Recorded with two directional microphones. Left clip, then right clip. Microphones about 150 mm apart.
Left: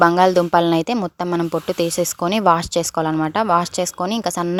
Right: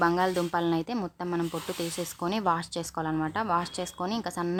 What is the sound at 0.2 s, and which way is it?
Speech, 45° left (ahead or behind).